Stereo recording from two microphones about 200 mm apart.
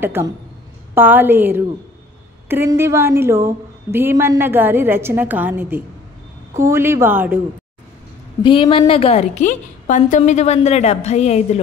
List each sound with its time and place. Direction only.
0.0 s a woman's voice: 10° right (ahead or behind)
8.4 s a woman's voice: 25° left (ahead or behind)